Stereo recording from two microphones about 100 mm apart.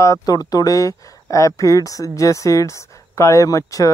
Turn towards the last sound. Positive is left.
turn(degrees=35)  # may be behind; listen again after turning